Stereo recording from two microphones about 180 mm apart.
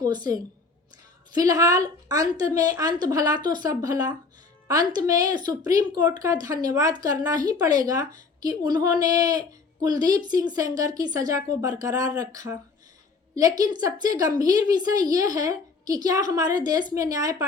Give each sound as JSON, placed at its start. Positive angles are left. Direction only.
{"t": 0.0, "sound": "a woman's voice", "side_deg": -20}